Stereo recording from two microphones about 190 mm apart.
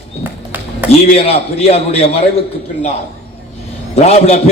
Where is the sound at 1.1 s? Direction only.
30° left (ahead or behind).